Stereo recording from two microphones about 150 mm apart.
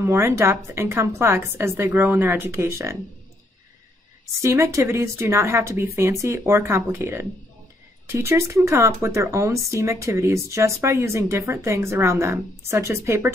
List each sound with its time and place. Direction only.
0.0 s speech: 15° right (ahead or behind)
4.4 s speech: 20° right (ahead or behind)